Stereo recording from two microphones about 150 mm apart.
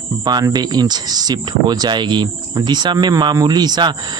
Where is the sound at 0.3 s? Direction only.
25° right (ahead or behind).